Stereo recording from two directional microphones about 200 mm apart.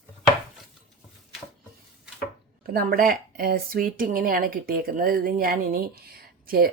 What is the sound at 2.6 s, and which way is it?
Speech, 50° right (ahead or behind).